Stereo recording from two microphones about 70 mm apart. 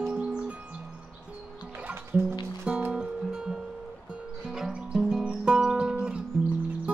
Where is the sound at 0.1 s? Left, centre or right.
Centre.